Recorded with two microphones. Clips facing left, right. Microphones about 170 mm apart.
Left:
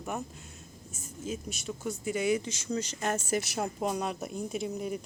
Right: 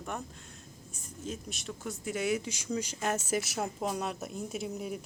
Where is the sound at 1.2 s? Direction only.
Centre (ahead or behind).